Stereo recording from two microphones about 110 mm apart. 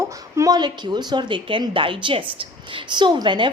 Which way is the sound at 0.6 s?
40° right (ahead or behind).